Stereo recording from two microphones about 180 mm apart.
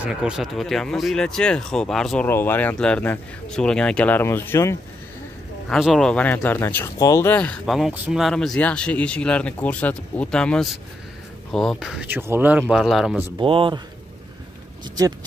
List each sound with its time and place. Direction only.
0.0 s speech: 5° right (ahead or behind); by 4.7 s 15° left (ahead or behind)
5.7 s speech: centre (ahead or behind)
13.4 s speech: 25° right (ahead or behind)